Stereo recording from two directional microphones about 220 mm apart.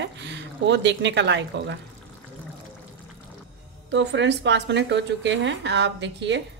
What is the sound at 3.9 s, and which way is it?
A woman's voice, 55° right (ahead or behind).